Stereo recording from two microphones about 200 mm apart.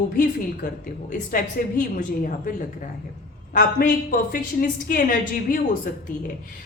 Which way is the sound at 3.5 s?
45° left (ahead or behind).